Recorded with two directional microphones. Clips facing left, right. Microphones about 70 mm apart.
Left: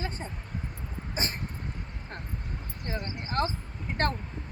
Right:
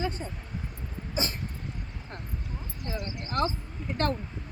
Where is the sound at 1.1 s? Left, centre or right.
Left.